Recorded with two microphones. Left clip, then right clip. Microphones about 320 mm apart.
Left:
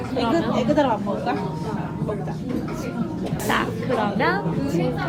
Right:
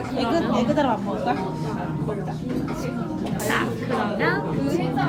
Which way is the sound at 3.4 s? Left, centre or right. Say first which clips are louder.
Left 2 dB; centre.